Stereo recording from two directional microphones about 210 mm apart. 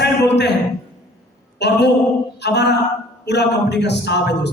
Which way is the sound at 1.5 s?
55° left (ahead or behind).